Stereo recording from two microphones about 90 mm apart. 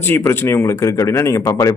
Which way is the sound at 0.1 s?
30° left (ahead or behind).